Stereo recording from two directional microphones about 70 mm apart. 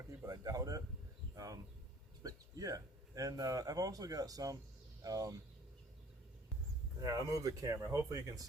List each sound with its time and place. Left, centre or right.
0.3 s a sound: right
2.2 s speech: right
7.0 s speech: right